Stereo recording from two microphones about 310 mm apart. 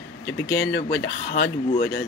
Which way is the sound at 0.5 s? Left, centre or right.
Left.